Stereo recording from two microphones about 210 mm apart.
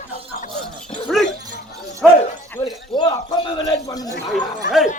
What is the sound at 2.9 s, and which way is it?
A man's voice, 20° left (ahead or behind).